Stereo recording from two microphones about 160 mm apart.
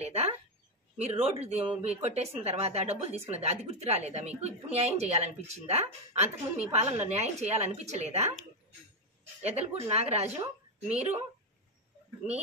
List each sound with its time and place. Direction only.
0.0 s a sound: 40° right (ahead or behind)
0.9 s a woman's voice: 40° right (ahead or behind)
9.4 s a woman's voice: 40° right (ahead or behind)